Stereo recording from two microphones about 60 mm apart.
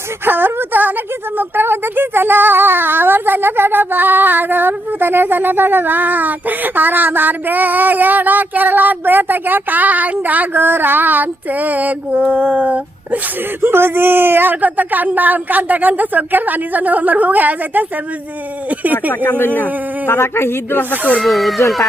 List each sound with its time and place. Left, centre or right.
0.3 s a woman's voice: right
13.6 s speech: right
19.2 s speech: left
21.2 s speech: centre